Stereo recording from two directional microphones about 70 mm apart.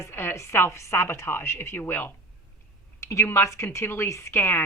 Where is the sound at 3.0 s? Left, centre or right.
Left.